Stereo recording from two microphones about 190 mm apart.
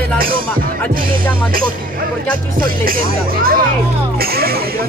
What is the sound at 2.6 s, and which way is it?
Speech, 50° right (ahead or behind).